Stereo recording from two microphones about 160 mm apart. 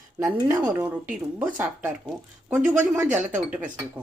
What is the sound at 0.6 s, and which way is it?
Speech, 10° right (ahead or behind).